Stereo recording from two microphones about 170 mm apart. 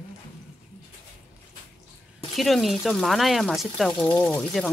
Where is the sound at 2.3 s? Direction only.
Centre (ahead or behind).